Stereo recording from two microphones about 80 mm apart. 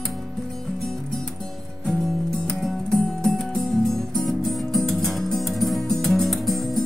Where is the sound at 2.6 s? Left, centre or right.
Centre.